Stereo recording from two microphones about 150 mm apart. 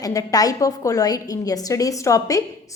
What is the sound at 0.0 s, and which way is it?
A woman's voice, 25° left (ahead or behind).